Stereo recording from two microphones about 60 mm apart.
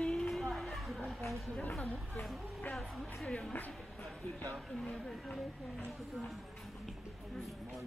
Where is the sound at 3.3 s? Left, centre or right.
Left.